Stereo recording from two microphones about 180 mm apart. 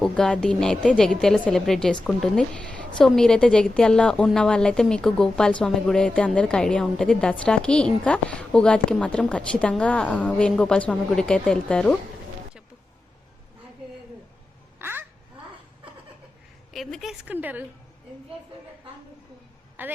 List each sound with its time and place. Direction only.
0.0 s a woman's voice: 5° left (ahead or behind)
14.8 s quack: 10° right (ahead or behind)
16.7 s a woman's voice: centre (ahead or behind)
19.8 s a woman's voice: 10° right (ahead or behind)